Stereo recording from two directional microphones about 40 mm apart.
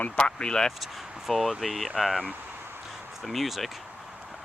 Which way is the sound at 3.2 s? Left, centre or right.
Centre.